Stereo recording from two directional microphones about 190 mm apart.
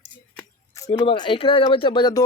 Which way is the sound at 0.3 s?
15° left (ahead or behind).